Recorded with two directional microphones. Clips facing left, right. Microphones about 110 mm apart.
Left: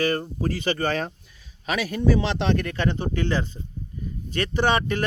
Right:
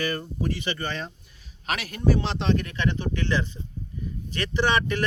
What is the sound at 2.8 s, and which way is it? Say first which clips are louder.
Speech: left 2 dB; 45° left (ahead or behind).